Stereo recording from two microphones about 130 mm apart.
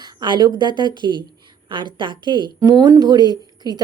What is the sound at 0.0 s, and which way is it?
A woman's voice, 35° right (ahead or behind).